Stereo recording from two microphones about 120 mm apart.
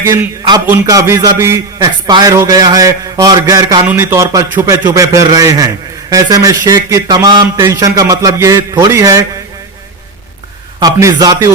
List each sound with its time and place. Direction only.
0.0 s a man's voice: 20° right (ahead or behind)
1.8 s a man's voice: 35° right (ahead or behind)
3.8 s a man's voice: 20° right (ahead or behind)
10.8 s a man's voice: 30° right (ahead or behind)